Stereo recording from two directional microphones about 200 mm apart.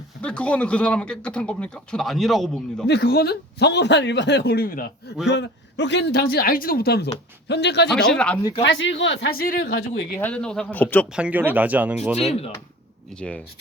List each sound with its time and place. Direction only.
0.2 s a man's voice: 5° left (ahead or behind)
2.8 s speech: 55° left (ahead or behind)
5.3 s speech: 60° left (ahead or behind)
7.9 s a man's voice: 5° left (ahead or behind)
8.6 s speech: 65° left (ahead or behind)
10.2 s speech: 5° left (ahead or behind)
11.1 s a man's voice: 5° right (ahead or behind)